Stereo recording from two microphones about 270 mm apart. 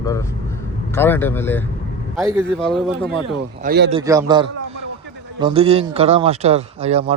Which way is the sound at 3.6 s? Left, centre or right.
Right.